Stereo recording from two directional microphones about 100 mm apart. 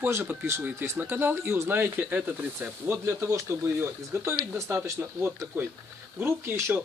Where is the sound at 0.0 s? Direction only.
20° right (ahead or behind).